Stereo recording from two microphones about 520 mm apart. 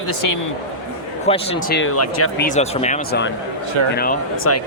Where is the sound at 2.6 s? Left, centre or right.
Centre.